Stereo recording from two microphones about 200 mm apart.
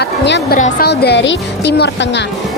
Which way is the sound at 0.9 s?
55° left (ahead or behind).